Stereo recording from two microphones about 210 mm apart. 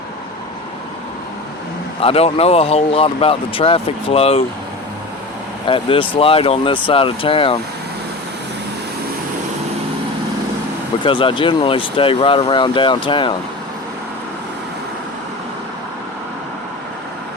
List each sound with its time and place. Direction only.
2.0 s speech: 25° left (ahead or behind)
5.6 s speech: 25° left (ahead or behind)
11.0 s speech: 25° left (ahead or behind)